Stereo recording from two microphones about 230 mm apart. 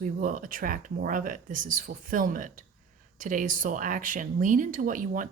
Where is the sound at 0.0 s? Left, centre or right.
Right.